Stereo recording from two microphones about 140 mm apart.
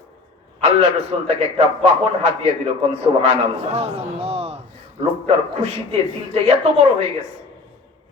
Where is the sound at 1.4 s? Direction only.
50° right (ahead or behind).